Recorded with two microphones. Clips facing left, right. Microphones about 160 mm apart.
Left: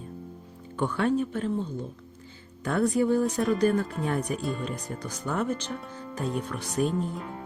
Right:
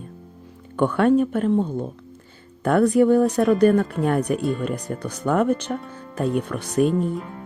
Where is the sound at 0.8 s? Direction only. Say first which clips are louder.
Right 8 dB; 60° right (ahead or behind).